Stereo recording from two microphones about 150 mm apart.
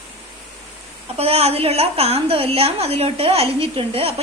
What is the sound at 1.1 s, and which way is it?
A woman's voice, 45° right (ahead or behind).